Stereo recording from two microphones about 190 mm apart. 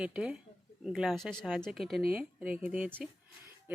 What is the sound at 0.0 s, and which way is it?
Speech, 5° right (ahead or behind).